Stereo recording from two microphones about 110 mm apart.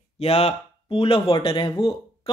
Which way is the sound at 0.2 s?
65° left (ahead or behind).